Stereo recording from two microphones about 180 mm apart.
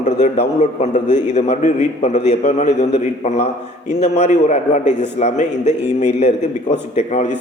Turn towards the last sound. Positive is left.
turn(degrees=40)  # may be behind; listen again after turning